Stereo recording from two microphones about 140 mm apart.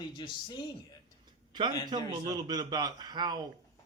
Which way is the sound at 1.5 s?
30° right (ahead or behind).